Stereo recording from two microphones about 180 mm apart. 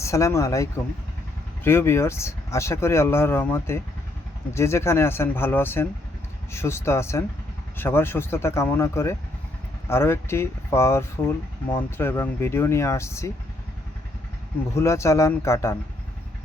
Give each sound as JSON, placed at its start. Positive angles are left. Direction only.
{"t": 0.0, "sound": "speech", "side_deg": 15}
{"t": 14.8, "sound": "speech", "side_deg": 15}